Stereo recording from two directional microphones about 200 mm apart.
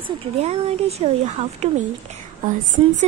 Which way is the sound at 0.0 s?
30° right (ahead or behind).